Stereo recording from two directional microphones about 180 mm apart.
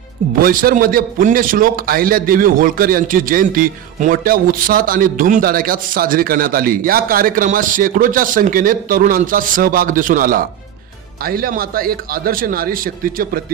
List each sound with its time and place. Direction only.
0.4 s a man's voice: 50° right (ahead or behind)